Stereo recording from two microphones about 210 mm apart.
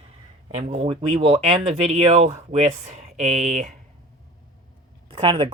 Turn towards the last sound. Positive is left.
turn(degrees=-25)  # may be behind; listen again after turning